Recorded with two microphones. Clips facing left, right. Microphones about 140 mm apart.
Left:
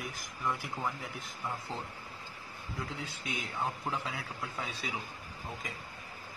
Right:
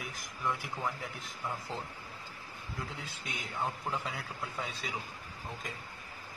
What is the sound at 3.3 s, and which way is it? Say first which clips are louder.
Speech: even; centre (ahead or behind).